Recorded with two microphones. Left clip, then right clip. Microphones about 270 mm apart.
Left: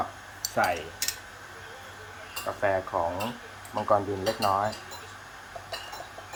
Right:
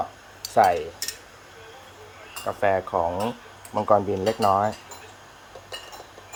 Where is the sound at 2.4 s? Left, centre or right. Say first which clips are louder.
Right 4 dB; right.